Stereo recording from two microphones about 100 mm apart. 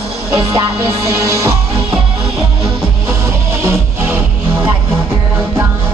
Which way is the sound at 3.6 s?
20° right (ahead or behind).